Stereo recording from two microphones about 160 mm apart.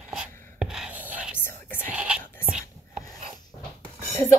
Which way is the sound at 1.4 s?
10° left (ahead or behind).